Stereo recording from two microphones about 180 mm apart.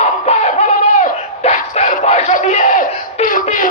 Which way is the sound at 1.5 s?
35° left (ahead or behind).